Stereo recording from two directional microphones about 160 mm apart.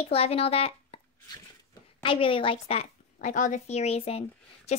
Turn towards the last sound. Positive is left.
turn(degrees=40)  # may be behind; listen again after turning